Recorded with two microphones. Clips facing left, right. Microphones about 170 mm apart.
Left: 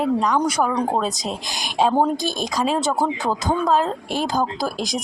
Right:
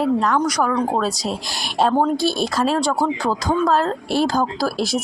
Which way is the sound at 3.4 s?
5° left (ahead or behind).